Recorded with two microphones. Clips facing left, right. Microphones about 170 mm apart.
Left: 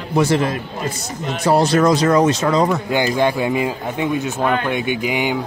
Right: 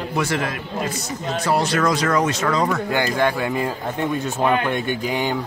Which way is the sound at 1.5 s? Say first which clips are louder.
Left 6 dB; 40° left (ahead or behind).